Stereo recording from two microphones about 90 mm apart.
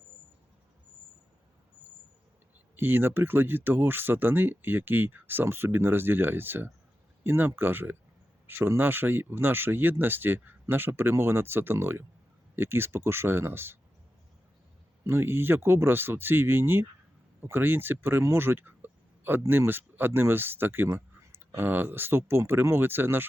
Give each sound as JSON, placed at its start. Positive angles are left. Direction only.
{"t": 2.7, "sound": "speech", "side_deg": -25}
{"t": 15.0, "sound": "speech", "side_deg": -25}